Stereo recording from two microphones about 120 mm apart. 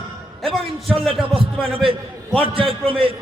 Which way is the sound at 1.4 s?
50° right (ahead or behind).